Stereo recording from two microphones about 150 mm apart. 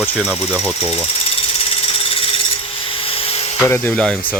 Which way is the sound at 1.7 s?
40° left (ahead or behind).